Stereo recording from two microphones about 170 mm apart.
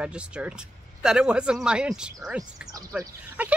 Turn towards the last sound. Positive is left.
turn(degrees=-10)  # may be behind; listen again after turning